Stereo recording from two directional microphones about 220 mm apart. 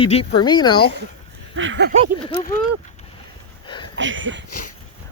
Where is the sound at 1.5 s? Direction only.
60° right (ahead or behind).